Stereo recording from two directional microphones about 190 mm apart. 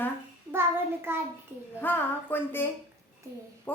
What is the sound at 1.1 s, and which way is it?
Speech, 10° right (ahead or behind).